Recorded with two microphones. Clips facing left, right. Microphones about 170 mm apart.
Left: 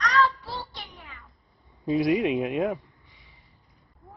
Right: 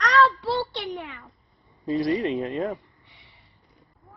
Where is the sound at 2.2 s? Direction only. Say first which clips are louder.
Left 1 dB; 15° left (ahead or behind).